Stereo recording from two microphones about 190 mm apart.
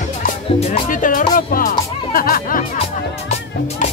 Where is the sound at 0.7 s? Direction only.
45° left (ahead or behind).